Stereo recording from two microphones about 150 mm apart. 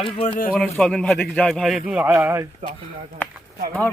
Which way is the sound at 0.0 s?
40° left (ahead or behind).